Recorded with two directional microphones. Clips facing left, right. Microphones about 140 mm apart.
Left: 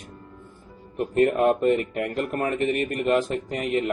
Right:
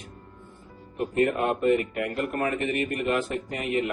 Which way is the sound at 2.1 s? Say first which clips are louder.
Left 2 dB; 40° left (ahead or behind).